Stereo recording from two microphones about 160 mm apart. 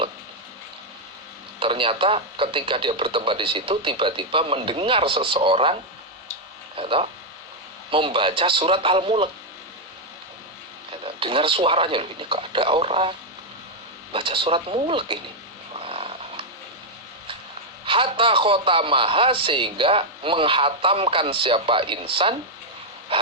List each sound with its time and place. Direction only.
1.5 s a man's voice: 35° right (ahead or behind)
6.7 s a man's voice: 35° right (ahead or behind)
11.0 s a man's voice: 35° right (ahead or behind)
15.8 s a sound: 35° right (ahead or behind)
17.8 s a man's voice: 35° right (ahead or behind)